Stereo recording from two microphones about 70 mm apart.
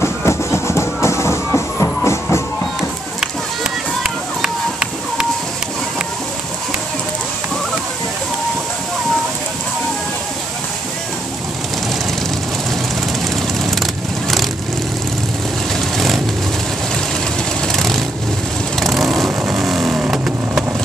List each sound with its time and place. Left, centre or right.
0.0 s music: left
4.0 s run: centre
17.6 s vehicle: centre